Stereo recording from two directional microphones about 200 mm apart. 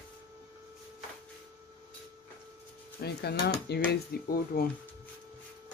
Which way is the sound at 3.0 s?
55° left (ahead or behind).